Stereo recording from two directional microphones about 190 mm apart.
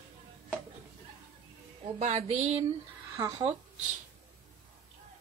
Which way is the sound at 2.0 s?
35° right (ahead or behind).